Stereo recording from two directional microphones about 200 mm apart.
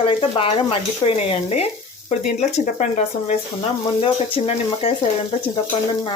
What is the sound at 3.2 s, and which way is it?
Frying, 30° left (ahead or behind).